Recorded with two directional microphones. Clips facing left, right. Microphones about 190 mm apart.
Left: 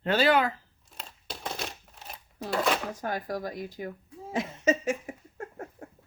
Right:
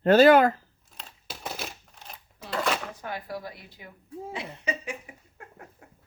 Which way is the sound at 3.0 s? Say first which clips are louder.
Left 3 dB; 45° left (ahead or behind).